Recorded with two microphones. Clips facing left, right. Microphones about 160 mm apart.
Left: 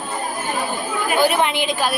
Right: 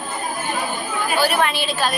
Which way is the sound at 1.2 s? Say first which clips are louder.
Left 2 dB; 20° left (ahead or behind).